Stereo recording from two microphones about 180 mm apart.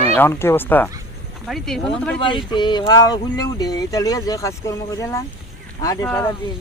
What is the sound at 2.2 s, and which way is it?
Speech, 25° left (ahead or behind).